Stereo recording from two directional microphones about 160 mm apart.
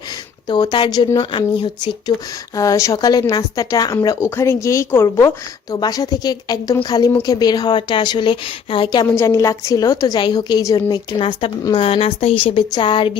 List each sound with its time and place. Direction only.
0.4 s a woman's voice: 30° left (ahead or behind)